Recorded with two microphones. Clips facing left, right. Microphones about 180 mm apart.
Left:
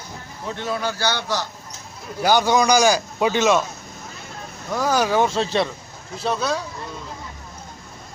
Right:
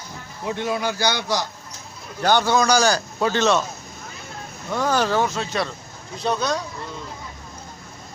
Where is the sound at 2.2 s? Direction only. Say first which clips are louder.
Left 1 dB; 10° left (ahead or behind).